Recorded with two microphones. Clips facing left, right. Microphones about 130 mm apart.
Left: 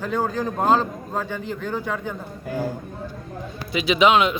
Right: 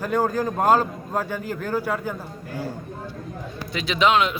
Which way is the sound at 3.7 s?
5° left (ahead or behind).